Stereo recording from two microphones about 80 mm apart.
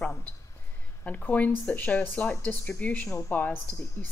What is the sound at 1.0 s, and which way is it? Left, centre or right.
Speech, centre.